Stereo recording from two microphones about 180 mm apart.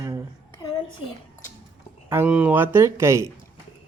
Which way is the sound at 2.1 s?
10° right (ahead or behind).